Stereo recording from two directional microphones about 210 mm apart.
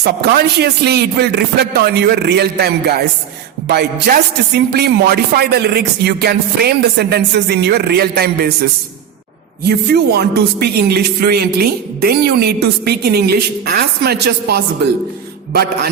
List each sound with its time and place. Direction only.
0.0 s speech: 50° right (ahead or behind)
9.6 s speech: 50° right (ahead or behind)